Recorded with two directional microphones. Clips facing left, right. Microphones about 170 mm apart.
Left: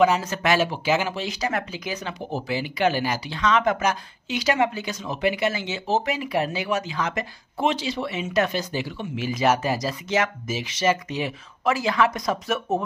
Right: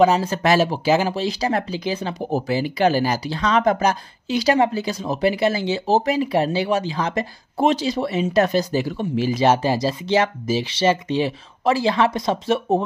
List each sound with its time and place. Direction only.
0.0 s speech: 35° right (ahead or behind)